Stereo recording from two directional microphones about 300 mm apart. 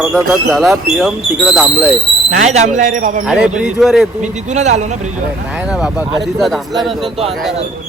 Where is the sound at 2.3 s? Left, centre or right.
Right.